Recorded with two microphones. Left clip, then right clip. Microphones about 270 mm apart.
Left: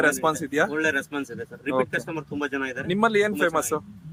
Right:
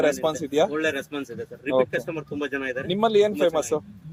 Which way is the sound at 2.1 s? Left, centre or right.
Left.